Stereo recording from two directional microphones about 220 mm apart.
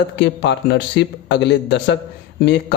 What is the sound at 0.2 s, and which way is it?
A man's voice, 50° left (ahead or behind).